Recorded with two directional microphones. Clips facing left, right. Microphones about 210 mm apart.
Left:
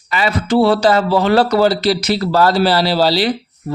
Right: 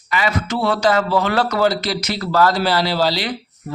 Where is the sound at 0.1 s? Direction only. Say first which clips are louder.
Left 5 dB; 30° left (ahead or behind).